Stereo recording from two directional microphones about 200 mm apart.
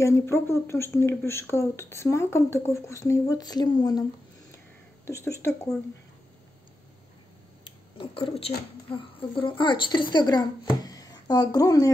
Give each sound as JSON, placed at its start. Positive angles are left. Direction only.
{"t": 0.0, "sound": "speech", "side_deg": 15}
{"t": 5.0, "sound": "speech", "side_deg": 15}
{"t": 7.6, "sound": "a sound", "side_deg": 25}
{"t": 9.4, "sound": "speech", "side_deg": 25}